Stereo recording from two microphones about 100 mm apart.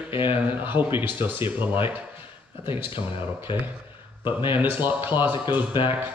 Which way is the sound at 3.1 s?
25° right (ahead or behind).